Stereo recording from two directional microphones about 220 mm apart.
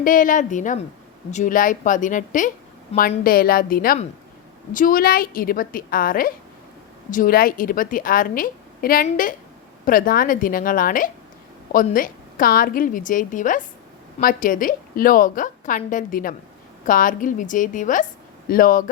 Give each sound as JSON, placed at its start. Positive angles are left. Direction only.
{"t": 0.0, "sound": "a woman's voice", "side_deg": 35}